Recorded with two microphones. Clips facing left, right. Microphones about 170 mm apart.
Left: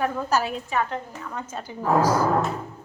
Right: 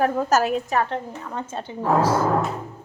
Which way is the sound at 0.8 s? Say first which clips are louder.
Right 3 dB; 30° right (ahead or behind).